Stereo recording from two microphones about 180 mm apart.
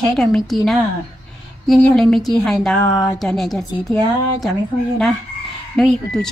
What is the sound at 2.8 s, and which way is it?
Speech, 20° left (ahead or behind).